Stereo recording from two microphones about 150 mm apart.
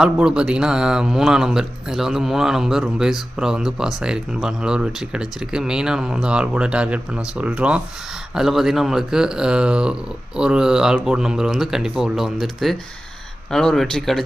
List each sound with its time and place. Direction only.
0.0 s speech: 5° right (ahead or behind)